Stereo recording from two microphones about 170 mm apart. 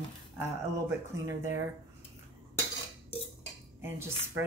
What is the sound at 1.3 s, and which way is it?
Speech, 15° right (ahead or behind).